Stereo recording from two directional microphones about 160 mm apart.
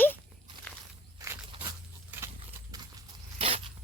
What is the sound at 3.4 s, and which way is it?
Dog, 35° right (ahead or behind).